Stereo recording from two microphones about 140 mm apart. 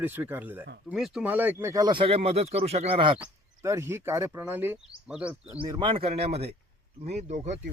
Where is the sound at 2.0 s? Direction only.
45° right (ahead or behind).